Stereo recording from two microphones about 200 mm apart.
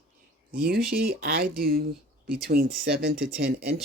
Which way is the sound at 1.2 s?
50° right (ahead or behind).